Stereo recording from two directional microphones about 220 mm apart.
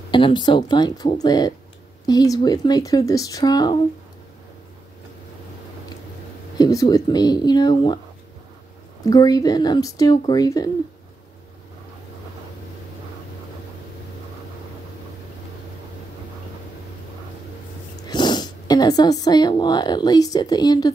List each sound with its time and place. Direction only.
0.1 s speech: 20° left (ahead or behind)
6.6 s speech: 15° left (ahead or behind)
9.0 s speech: 15° left (ahead or behind)
18.0 s speech: 20° left (ahead or behind)